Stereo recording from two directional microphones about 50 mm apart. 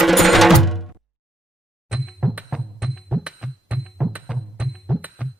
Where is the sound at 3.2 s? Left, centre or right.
Centre.